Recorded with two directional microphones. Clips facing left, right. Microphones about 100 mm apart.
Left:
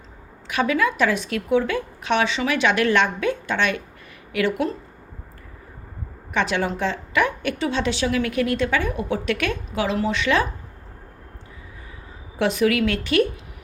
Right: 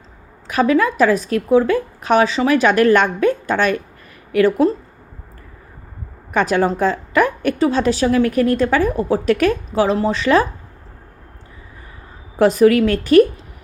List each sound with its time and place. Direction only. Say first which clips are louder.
0.4 s a woman's voice: right 6 dB; 40° right (ahead or behind)
6.3 s a woman's voice: right 6 dB; 40° right (ahead or behind)
12.4 s a woman's voice: right 8 dB; 40° right (ahead or behind)